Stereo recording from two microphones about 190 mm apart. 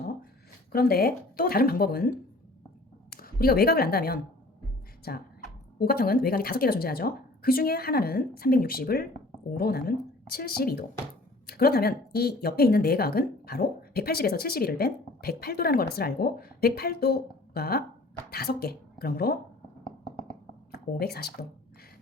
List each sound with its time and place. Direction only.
0.7 s speech: 55° left (ahead or behind)
3.2 s a woman's voice: 50° left (ahead or behind)
21.0 s a woman's voice: 55° left (ahead or behind)